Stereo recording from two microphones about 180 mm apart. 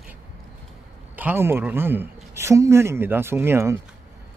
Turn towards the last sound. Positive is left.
turn(degrees=-15)  # may be behind; listen again after turning